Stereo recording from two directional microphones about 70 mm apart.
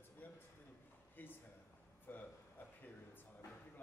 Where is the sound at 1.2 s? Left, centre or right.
Left.